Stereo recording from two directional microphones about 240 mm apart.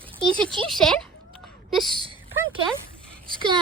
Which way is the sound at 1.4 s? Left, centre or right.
Centre.